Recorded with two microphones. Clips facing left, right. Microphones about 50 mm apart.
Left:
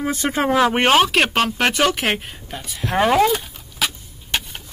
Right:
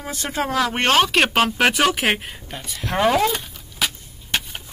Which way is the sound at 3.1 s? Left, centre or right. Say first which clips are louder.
Left 2 dB; centre.